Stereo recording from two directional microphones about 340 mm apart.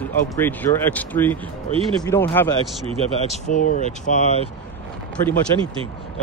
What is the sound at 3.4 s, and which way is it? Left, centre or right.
Speech, left.